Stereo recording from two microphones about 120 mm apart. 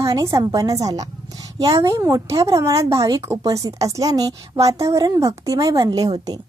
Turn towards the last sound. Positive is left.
turn(degrees=-30)  # may be behind; listen again after turning